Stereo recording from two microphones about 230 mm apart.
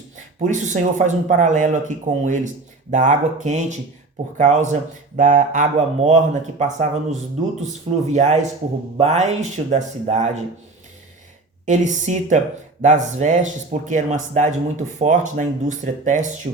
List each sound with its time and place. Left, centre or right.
0.3 s speech: right
11.6 s speech: right